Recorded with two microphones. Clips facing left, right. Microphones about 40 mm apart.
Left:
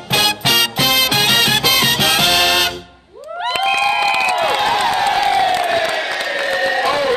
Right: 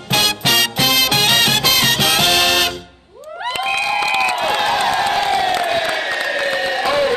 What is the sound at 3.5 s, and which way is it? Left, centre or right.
Cheering, left.